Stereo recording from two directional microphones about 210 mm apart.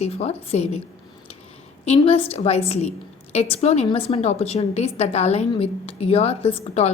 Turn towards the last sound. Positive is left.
turn(degrees=30)  # may be behind; listen again after turning